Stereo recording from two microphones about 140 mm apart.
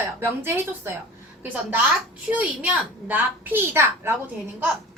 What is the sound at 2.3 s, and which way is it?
A woman's voice, 10° right (ahead or behind).